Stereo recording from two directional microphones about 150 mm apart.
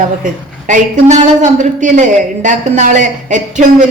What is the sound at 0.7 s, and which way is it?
A woman's voice, 55° right (ahead or behind).